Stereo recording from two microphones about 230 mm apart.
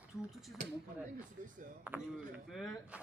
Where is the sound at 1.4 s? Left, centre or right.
Right.